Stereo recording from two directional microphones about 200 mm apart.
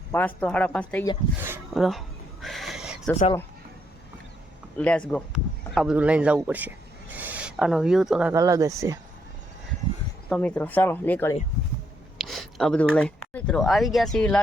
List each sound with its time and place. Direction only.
0.1 s speech: 10° left (ahead or behind)
1.4 s a sound: 10° right (ahead or behind)
1.7 s a sound: centre (ahead or behind)
4.8 s speech: 5° left (ahead or behind)
8.3 s speech: 15° right (ahead or behind)
10.2 s speech: 5° left (ahead or behind)